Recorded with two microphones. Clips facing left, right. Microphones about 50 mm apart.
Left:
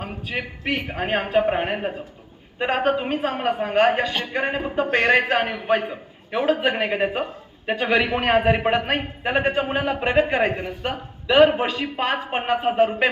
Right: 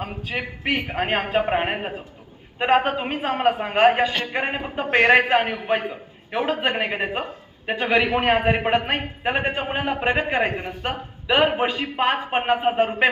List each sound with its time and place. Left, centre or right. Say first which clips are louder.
0.0 s a man's voice: right 1 dB; centre